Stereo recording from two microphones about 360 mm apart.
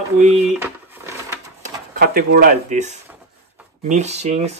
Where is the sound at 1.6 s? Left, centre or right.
Right.